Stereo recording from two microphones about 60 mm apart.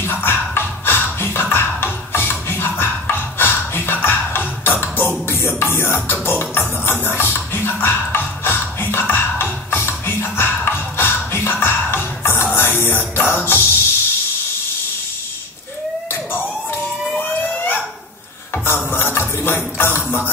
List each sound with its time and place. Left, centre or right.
0.0 s beatboxing: left
5.2 s music: left
16.1 s a sound: left
17.2 s emergency vehicle: left
18.5 s a sound: left
18.9 s music: left